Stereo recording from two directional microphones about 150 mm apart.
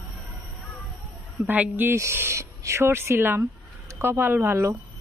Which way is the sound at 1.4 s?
10° right (ahead or behind).